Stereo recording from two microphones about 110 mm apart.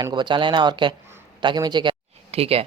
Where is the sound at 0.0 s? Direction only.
45° right (ahead or behind).